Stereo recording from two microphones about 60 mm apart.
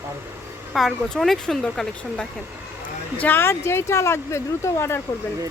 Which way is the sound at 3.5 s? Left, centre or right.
Left.